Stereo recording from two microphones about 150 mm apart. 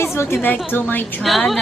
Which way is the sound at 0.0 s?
15° left (ahead or behind).